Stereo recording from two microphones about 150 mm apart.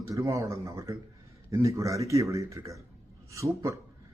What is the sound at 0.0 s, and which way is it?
Speech, 20° right (ahead or behind).